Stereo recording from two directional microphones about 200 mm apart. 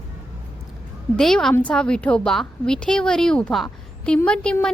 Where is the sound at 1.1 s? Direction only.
Centre (ahead or behind).